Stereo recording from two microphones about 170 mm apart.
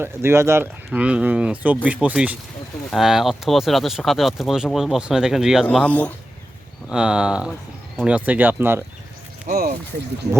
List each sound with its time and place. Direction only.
0.0 s speech: 15° right (ahead or behind)
5.6 s speech: 10° left (ahead or behind)
6.9 s speech: 5° right (ahead or behind)
9.5 s speech: 60° right (ahead or behind)